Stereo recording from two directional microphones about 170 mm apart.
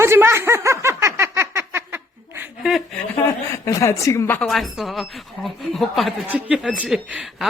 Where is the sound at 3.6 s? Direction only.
15° left (ahead or behind).